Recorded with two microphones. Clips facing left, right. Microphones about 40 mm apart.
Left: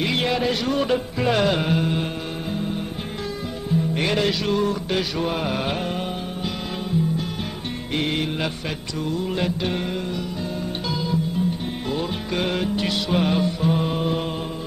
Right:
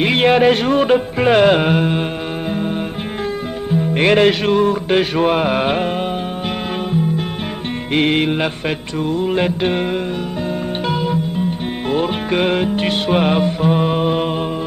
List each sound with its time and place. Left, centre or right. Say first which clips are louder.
0.0 s music: right 10 dB; right
3.9 s music: right 13 dB; right
7.9 s music: right 9 dB; right
10.9 s music: right 5 dB; right